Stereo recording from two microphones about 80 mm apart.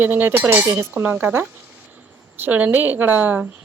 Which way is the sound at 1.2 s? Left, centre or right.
Right.